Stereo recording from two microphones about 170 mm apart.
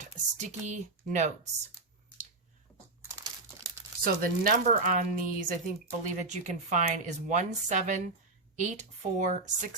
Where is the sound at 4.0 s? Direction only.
55° right (ahead or behind).